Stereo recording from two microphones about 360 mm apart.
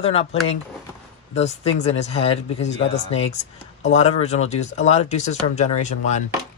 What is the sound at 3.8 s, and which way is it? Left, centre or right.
Speech, centre.